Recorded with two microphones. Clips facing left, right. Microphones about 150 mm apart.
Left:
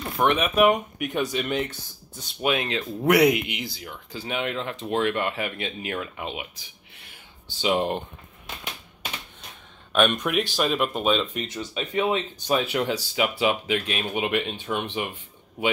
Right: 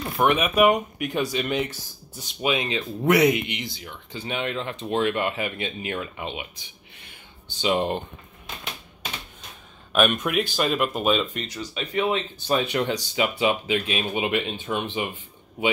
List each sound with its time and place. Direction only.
0.0 s speech: 5° right (ahead or behind)
9.9 s speech: 5° right (ahead or behind)
11.4 s speech: 25° left (ahead or behind); by 15.1 s centre (ahead or behind)